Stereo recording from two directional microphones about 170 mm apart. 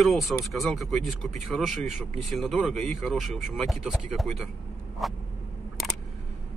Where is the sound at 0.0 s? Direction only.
Centre (ahead or behind).